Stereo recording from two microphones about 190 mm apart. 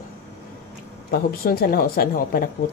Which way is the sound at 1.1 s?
55° left (ahead or behind).